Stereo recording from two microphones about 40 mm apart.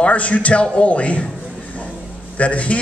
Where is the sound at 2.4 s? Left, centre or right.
Left.